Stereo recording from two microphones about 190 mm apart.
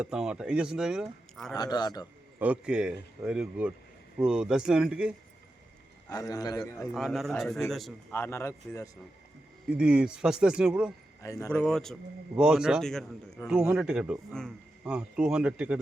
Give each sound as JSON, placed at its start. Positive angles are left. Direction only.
{"t": 0.0, "sound": "a man's voice", "side_deg": -5}
{"t": 1.5, "sound": "a man's voice", "side_deg": 20}
{"t": 2.4, "sound": "a man's voice", "side_deg": -5}
{"t": 6.1, "sound": "a man's voice", "side_deg": 20}
{"t": 6.9, "sound": "a man's voice", "side_deg": 0}
{"t": 8.1, "sound": "speech", "side_deg": 15}
{"t": 9.7, "sound": "a man's voice", "side_deg": -5}
{"t": 11.2, "sound": "speech", "side_deg": 20}
{"t": 11.5, "sound": "a man's voice", "side_deg": 5}